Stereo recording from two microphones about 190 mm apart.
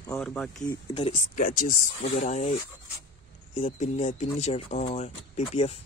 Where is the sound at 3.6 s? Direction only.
30° left (ahead or behind).